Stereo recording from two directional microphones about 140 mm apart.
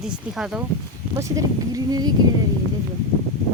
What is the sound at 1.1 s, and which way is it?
Speech, 25° right (ahead or behind).